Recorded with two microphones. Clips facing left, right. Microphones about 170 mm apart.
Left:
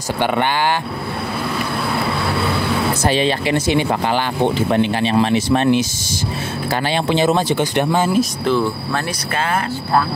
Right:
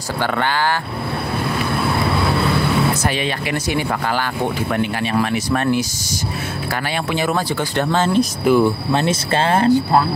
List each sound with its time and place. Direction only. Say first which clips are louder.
3.0 s speech: left 4 dB; 30° left (ahead or behind)
7.1 s speech: left 4 dB; 25° left (ahead or behind)
8.5 s speech: right 3 dB; 15° right (ahead or behind)